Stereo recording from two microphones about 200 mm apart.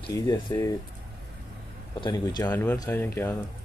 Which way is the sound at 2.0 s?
20° left (ahead or behind).